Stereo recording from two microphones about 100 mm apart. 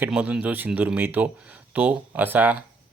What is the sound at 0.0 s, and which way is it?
Speech, 15° right (ahead or behind).